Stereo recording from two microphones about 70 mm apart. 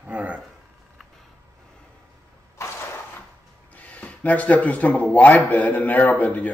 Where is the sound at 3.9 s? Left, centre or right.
Centre.